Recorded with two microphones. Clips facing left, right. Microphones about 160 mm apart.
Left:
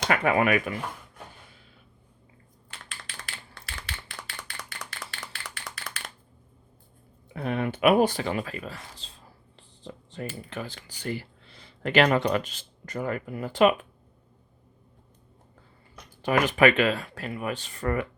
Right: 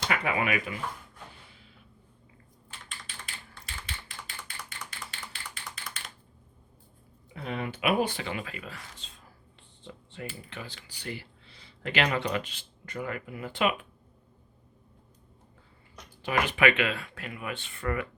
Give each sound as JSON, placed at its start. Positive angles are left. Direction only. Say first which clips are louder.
{"t": 0.0, "sound": "speech", "louder": "left 6 dB", "side_deg": 50}
{"t": 2.6, "sound": "typing", "louder": "left 2 dB", "side_deg": 75}
{"t": 7.3, "sound": "speech", "louder": "left 6 dB", "side_deg": 55}
{"t": 16.2, "sound": "speech", "louder": "left 5 dB", "side_deg": 45}